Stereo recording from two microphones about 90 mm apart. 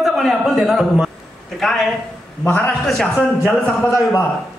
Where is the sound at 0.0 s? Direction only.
Centre (ahead or behind).